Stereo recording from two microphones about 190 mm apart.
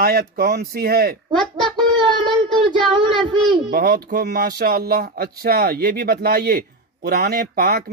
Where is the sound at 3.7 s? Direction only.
50° right (ahead or behind).